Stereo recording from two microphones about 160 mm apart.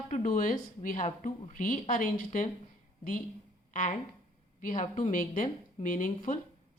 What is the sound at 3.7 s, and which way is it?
A woman's voice, 55° left (ahead or behind).